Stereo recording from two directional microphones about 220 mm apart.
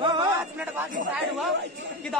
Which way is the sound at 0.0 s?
20° right (ahead or behind).